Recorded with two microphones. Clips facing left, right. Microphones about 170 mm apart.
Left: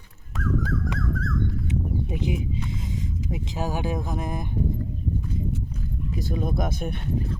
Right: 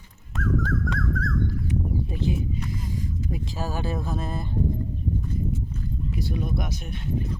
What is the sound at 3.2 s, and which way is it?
Speech, 20° left (ahead or behind).